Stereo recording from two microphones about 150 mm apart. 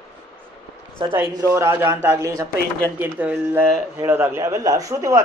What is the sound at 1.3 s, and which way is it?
Speech, 20° right (ahead or behind).